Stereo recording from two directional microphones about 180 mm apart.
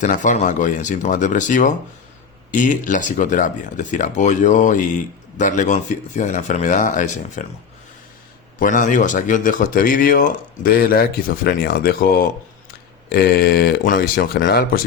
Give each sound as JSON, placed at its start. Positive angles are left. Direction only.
{"t": 0.0, "sound": "speech", "side_deg": 45}
{"t": 8.5, "sound": "speech", "side_deg": 45}